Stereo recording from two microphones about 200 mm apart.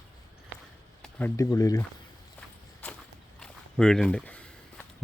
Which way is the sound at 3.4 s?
5° left (ahead or behind).